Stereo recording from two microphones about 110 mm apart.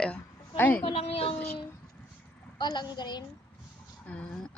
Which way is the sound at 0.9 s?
60° left (ahead or behind).